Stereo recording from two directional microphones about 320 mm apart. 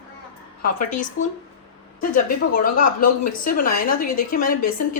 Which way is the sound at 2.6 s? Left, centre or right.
Left.